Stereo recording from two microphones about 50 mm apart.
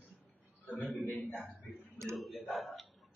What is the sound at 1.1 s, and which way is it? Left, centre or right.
Speech, left.